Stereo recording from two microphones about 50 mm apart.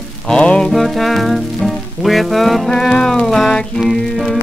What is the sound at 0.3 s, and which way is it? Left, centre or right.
Music, centre.